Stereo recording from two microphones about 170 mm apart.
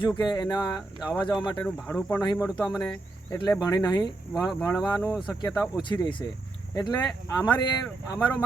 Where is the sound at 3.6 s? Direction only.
25° left (ahead or behind).